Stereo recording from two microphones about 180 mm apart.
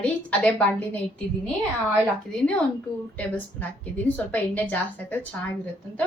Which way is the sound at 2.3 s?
5° left (ahead or behind).